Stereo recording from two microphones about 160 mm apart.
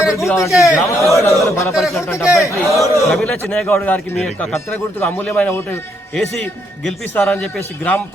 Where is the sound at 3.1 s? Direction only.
5° left (ahead or behind).